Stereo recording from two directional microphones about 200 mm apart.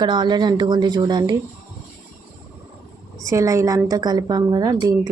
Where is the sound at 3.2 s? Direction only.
15° right (ahead or behind).